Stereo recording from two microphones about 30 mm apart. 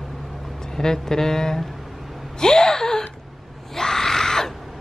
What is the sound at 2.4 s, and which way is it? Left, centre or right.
Gasp, left.